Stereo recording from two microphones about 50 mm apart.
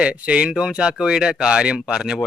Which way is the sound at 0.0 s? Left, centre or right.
Right.